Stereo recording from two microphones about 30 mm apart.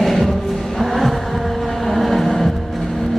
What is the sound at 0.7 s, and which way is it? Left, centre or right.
Insect, centre.